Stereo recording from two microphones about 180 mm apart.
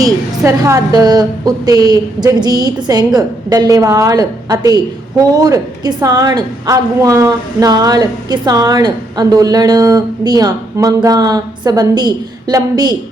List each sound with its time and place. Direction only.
0.0 s a woman's voice: 15° right (ahead or behind)